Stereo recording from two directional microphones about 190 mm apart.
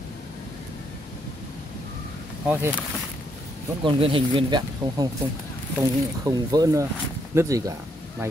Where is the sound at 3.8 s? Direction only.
25° right (ahead or behind).